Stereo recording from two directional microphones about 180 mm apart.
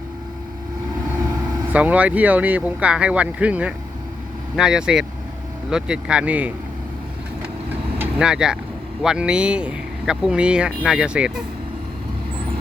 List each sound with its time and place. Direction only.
1.7 s speech: 10° right (ahead or behind)
7.9 s vehicle: 10° right (ahead or behind)
9.0 s speech: 5° right (ahead or behind)